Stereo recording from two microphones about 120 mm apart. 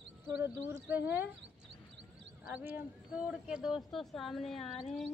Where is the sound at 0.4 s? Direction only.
20° right (ahead or behind).